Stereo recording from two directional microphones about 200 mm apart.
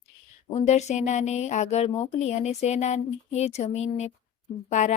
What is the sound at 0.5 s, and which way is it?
A woman's voice, 35° left (ahead or behind).